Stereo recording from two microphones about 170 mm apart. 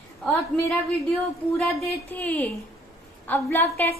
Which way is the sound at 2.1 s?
10° left (ahead or behind).